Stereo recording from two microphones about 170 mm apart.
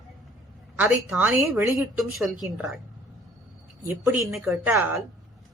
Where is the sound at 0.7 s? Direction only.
10° right (ahead or behind).